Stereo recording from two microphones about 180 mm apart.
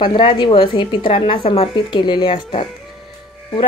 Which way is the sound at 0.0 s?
25° left (ahead or behind).